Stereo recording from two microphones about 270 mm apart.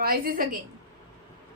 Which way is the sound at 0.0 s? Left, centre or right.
Right.